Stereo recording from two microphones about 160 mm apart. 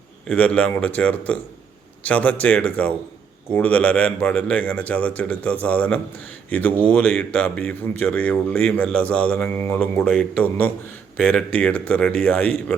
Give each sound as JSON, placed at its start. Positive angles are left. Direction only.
{"t": 0.3, "sound": "a man's voice", "side_deg": 5}